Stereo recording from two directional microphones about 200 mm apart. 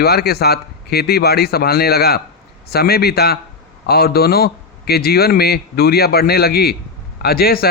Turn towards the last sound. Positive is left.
turn(degrees=50)  # may be behind; listen again after turning